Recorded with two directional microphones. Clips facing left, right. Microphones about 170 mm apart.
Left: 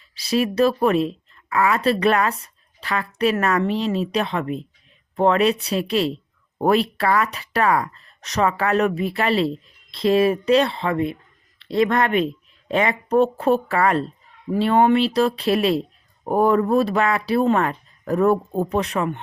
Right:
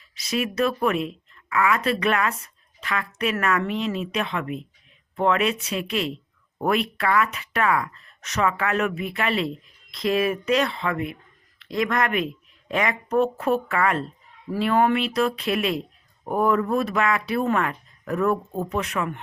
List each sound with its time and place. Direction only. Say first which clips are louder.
0.1 s a woman's voice: left 5 dB; 35° left (ahead or behind)